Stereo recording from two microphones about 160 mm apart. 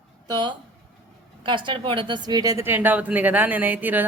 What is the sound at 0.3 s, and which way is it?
A woman's voice, 30° right (ahead or behind).